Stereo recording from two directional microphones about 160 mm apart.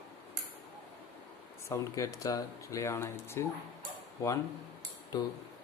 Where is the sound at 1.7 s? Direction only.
20° left (ahead or behind).